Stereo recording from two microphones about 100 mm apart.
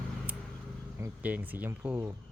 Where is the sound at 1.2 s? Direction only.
15° right (ahead or behind).